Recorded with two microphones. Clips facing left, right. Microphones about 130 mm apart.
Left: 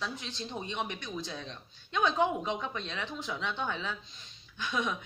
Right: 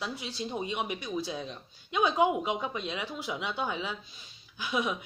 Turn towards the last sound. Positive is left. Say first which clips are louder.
# right 2 dB
turn(degrees=-10)  # may be behind; listen again after turning